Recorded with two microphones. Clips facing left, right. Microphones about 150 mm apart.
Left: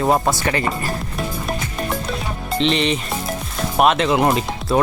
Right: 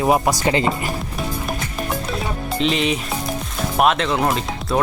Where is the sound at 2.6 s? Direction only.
5° right (ahead or behind).